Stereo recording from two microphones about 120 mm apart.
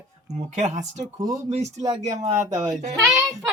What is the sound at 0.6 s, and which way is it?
Speech, 80° right.